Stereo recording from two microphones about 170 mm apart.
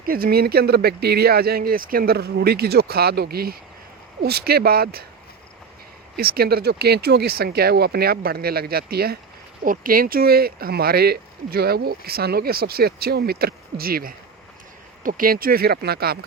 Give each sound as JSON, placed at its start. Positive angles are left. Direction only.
{"t": 0.0, "sound": "speech", "side_deg": -60}
{"t": 6.1, "sound": "speech", "side_deg": -65}